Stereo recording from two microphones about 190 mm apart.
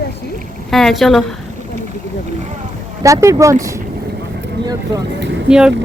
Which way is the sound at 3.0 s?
15° right (ahead or behind).